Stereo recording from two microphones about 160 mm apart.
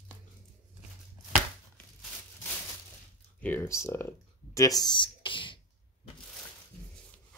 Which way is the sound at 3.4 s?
10° left (ahead or behind).